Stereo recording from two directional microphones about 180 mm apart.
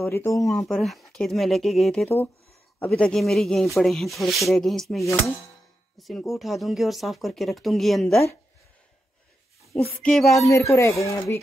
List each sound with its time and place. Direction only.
0.1 s speech: 15° left (ahead or behind)
0.5 s speech: centre (ahead or behind)
10.0 s speech: centre (ahead or behind)
10.5 s speech: 15° left (ahead or behind)